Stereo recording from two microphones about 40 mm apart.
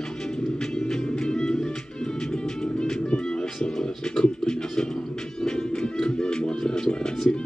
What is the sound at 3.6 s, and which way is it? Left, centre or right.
Music, centre.